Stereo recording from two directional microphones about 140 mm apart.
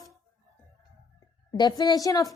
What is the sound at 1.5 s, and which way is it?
Speech, 30° left (ahead or behind).